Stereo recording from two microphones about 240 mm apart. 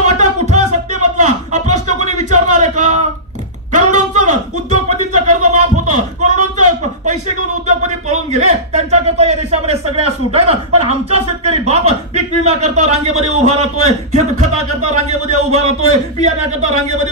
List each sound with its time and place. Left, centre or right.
0.0 s music: right
3.7 s a sound: right
10.8 s a man's voice: right